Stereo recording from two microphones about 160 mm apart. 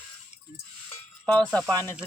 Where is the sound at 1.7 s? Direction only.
25° right (ahead or behind).